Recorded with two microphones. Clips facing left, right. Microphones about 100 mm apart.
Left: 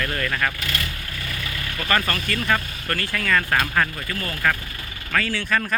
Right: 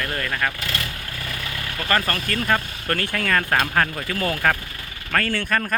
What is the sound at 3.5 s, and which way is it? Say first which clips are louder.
Speech: right 1 dB; 35° right (ahead or behind).